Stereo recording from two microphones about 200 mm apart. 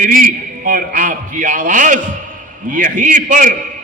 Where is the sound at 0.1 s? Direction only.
45° right (ahead or behind).